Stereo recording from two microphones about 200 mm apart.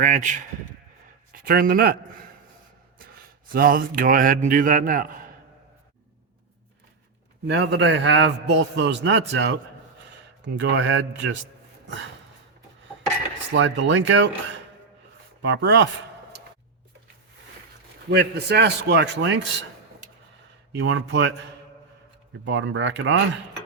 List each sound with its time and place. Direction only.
0.0 s speech: 40° right (ahead or behind)
3.5 s a man's voice: 45° right (ahead or behind)
7.4 s a man's voice: 60° right (ahead or behind)
13.5 s speech: 70° right (ahead or behind)
15.4 s a man's voice: 60° right (ahead or behind)
18.1 s a man's voice: 55° right (ahead or behind)
20.7 s a man's voice: 65° right (ahead or behind)
22.4 s speech: 70° right (ahead or behind)